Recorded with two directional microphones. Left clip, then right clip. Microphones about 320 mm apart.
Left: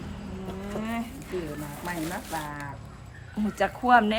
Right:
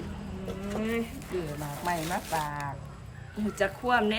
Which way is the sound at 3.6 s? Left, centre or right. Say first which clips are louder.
Left 5 dB; centre.